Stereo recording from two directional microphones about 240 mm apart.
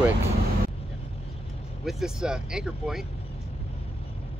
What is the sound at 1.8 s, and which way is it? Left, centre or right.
Speech, centre.